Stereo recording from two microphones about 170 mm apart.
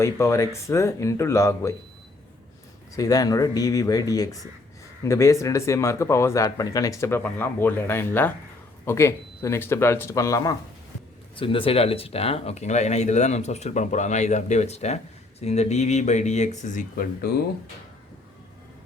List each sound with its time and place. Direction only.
0.0 s speech: 15° left (ahead or behind)
2.9 s speech: 20° left (ahead or behind)
11.3 s speech: 30° left (ahead or behind); by 17.4 s 65° left (ahead or behind)